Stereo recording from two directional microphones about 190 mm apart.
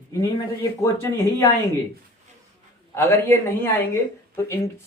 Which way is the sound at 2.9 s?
15° left (ahead or behind).